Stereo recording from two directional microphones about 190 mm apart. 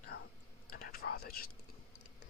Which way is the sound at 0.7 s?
50° left (ahead or behind).